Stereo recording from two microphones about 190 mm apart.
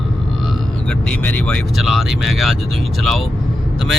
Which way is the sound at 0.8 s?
5° left (ahead or behind).